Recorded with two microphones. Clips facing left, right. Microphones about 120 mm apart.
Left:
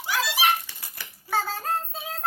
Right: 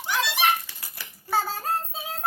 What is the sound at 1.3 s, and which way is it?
Child singing, 10° right (ahead or behind).